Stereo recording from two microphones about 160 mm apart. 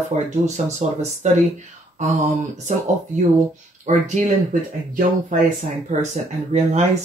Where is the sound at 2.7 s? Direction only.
50° right (ahead or behind).